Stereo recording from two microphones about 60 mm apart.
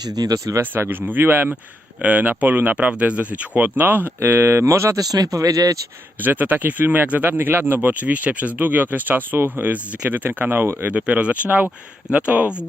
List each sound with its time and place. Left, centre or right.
0.2 s speech: right
0.6 s speech: right
4.2 s speech: right
4.6 s speech: right
4.9 s speech: right
6.2 s speech: right